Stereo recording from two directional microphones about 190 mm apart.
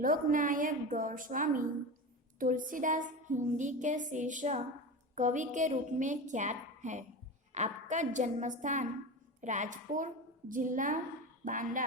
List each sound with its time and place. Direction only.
0.0 s a woman's voice: 45° right (ahead or behind)